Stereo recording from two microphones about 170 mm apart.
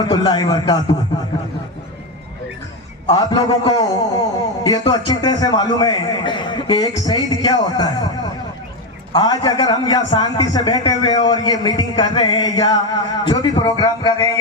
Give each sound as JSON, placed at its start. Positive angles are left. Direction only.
{"t": 0.0, "sound": "a man's voice", "side_deg": 25}
{"t": 3.1, "sound": "a man's voice", "side_deg": 25}
{"t": 9.1, "sound": "a man's voice", "side_deg": 25}